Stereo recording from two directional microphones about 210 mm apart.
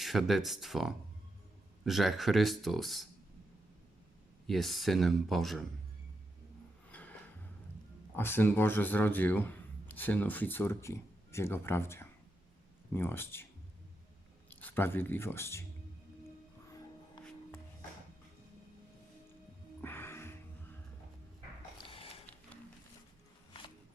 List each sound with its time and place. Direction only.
0.0 s speech: centre (ahead or behind)
4.4 s speech: centre (ahead or behind)
6.9 s music: 5° left (ahead or behind)
8.1 s speech: 10° left (ahead or behind)
14.5 s speech: 10° left (ahead or behind)
19.8 s music: 10° left (ahead or behind)
21.8 s a sound: 25° left (ahead or behind)